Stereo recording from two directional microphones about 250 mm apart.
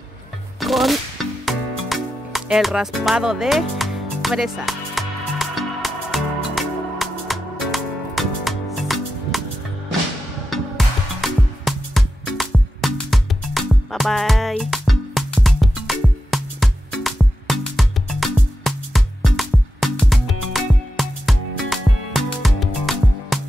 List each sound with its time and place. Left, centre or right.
0.6 s music: centre
11.1 s music: centre